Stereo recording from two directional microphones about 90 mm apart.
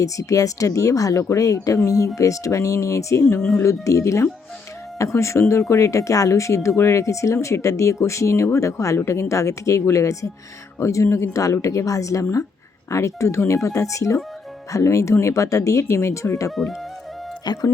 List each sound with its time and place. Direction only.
0.0 s speech: 40° left (ahead or behind)
17.4 s speech: 50° left (ahead or behind)